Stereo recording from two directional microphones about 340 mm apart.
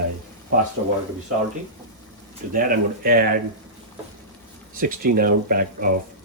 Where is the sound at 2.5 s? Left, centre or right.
Right.